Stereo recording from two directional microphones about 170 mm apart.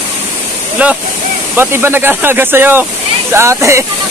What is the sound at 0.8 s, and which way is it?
Speech, 10° right (ahead or behind).